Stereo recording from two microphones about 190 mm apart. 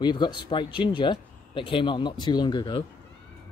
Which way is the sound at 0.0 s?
25° left (ahead or behind).